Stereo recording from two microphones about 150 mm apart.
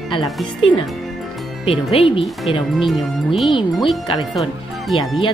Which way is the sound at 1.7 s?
40° left (ahead or behind).